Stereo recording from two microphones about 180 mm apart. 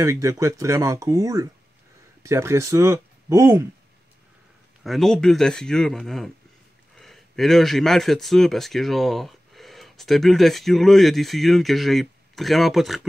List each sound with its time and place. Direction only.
0.0 s speech: 15° right (ahead or behind)
4.8 s speech: centre (ahead or behind)